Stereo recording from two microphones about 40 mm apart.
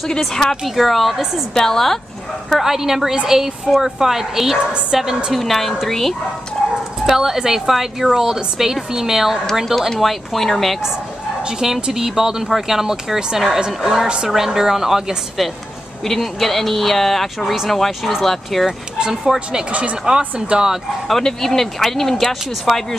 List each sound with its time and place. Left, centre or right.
0.2 s speech: centre
0.7 s speech: centre
2.5 s speech: centre
5.3 s speech: centre
7.1 s speech: centre
9.7 s speech: centre
11.9 s speech: centre
14.0 s speech: right
14.3 s speech: centre
16.0 s speech: centre
18.9 s speech: centre
19.7 s speech: right
21.1 s speech: centre